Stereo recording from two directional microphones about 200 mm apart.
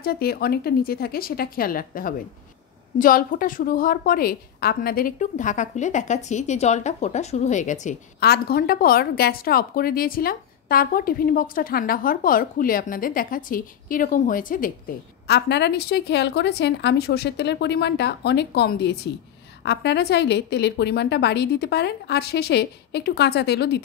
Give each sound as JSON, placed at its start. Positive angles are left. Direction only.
{"t": 0.0, "sound": "a woman's voice", "side_deg": 50}
{"t": 8.2, "sound": "a woman's voice", "side_deg": 50}
{"t": 15.2, "sound": "a woman's voice", "side_deg": 55}